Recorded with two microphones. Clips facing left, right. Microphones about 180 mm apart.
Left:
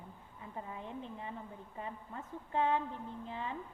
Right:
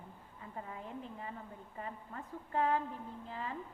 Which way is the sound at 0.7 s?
25° left (ahead or behind).